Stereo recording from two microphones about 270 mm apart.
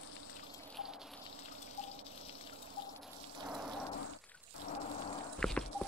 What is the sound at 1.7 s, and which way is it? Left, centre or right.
Water, left.